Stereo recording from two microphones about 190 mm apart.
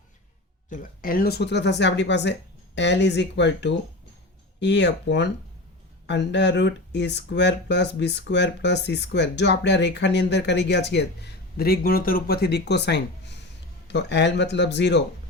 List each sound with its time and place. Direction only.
0.7 s speech: 45° left (ahead or behind); by 15.0 s 65° left (ahead or behind)